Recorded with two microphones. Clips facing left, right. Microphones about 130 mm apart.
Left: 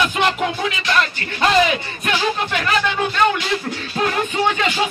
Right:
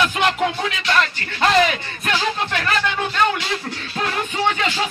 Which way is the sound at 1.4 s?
15° left (ahead or behind).